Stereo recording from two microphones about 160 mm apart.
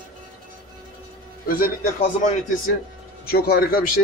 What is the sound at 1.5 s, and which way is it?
Speech, 65° left (ahead or behind).